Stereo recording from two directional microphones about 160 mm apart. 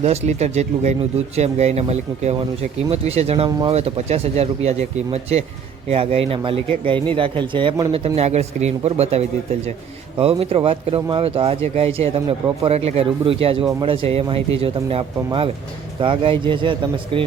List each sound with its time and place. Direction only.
0.0 s speech: 40° right (ahead or behind)